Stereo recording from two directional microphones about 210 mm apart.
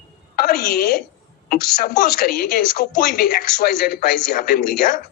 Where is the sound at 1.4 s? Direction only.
45° left (ahead or behind).